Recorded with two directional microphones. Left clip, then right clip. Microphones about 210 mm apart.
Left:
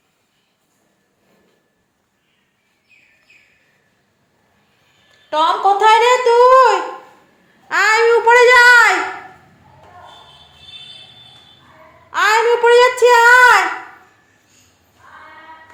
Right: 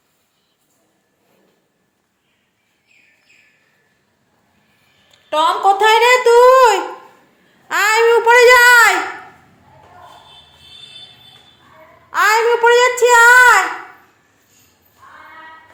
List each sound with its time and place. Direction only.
5.3 s speech: 10° right (ahead or behind)
7.7 s babbling: 15° right (ahead or behind)
12.1 s a sound: 10° right (ahead or behind)